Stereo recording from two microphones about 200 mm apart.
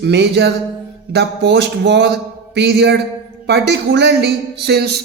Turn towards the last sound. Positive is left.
turn(degrees=-55)  # may be behind; listen again after turning